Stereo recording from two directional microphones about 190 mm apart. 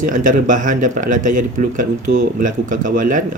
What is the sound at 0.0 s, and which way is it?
Speech, 45° right (ahead or behind).